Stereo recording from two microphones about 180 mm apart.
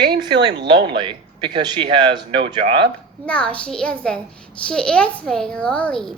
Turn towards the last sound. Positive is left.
turn(degrees=5)  # may be behind; listen again after turning